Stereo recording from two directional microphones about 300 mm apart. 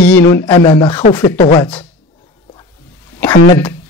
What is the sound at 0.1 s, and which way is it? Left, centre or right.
Speech, centre.